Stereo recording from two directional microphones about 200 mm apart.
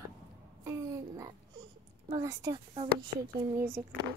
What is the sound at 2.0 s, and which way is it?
A woman's voice, 20° right (ahead or behind).